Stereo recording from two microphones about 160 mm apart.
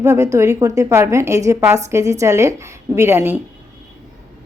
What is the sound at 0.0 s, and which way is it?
A woman's voice, 20° right (ahead or behind).